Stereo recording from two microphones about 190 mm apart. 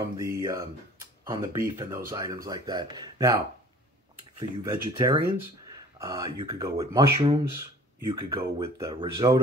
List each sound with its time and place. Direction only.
0.2 s speech: 15° right (ahead or behind)